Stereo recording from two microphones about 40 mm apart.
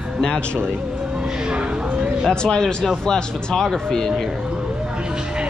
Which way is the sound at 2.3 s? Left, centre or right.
Centre.